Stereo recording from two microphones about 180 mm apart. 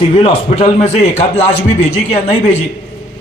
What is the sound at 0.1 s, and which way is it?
A man's voice, 35° left (ahead or behind).